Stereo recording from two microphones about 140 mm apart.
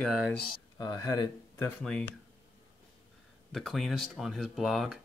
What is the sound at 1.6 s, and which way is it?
Speech, 10° left (ahead or behind).